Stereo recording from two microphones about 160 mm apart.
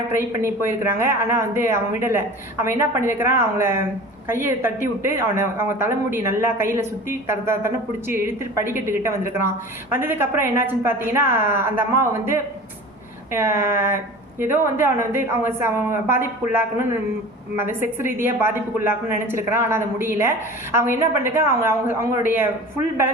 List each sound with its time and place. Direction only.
0.1 s a woman's voice: 15° right (ahead or behind)